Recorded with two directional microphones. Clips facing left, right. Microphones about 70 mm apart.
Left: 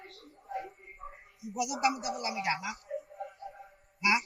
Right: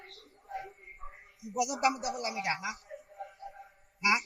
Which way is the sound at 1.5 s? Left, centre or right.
Right.